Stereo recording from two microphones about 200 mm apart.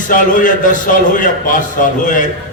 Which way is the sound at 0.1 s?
40° left (ahead or behind).